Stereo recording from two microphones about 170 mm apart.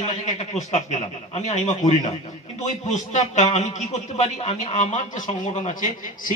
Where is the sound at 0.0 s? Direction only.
40° left (ahead or behind).